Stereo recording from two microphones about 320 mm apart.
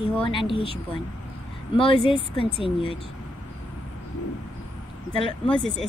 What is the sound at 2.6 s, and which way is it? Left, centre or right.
Speech, centre.